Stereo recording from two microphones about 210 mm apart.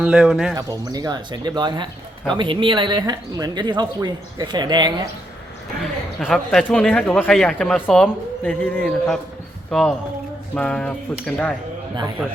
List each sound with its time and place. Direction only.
0.0 s speech: 5° right (ahead or behind)
0.5 s speech: 20° right (ahead or behind)
5.8 s speech: centre (ahead or behind)